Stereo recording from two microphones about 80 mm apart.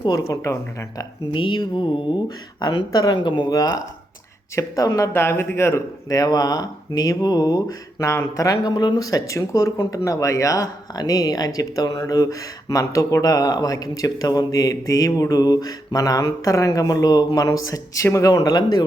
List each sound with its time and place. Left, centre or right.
0.3 s speech: left
1.3 s speech: left
2.6 s speech: left
3.2 s speech: left
3.5 s speech: left
5.1 s speech: left
6.1 s speech: left